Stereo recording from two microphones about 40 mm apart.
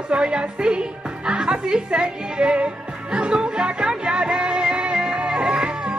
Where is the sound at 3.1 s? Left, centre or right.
Right.